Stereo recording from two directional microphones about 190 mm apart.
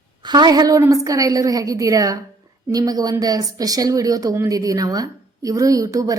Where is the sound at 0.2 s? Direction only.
20° right (ahead or behind).